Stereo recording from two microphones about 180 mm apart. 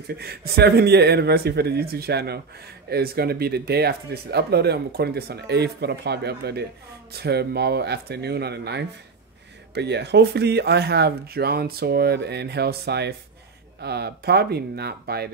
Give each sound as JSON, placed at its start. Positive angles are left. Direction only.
{"t": 0.0, "sound": "speech", "side_deg": -60}